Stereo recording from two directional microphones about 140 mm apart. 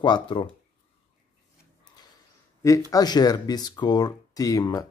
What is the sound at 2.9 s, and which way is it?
Speech, 30° left (ahead or behind).